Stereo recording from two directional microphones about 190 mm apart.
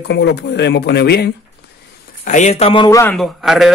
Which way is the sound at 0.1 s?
65° left (ahead or behind).